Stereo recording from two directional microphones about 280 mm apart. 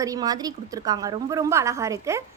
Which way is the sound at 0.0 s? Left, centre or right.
Centre.